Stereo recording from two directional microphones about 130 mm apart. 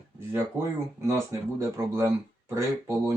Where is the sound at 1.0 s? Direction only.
20° right (ahead or behind).